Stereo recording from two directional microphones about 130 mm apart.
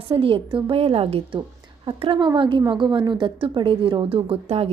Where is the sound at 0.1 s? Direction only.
45° right (ahead or behind).